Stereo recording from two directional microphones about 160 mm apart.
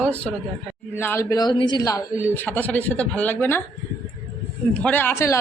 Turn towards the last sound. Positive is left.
turn(degrees=15)  # may be behind; listen again after turning